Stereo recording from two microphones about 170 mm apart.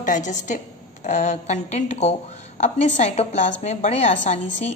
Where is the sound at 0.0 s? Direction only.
45° left (ahead or behind).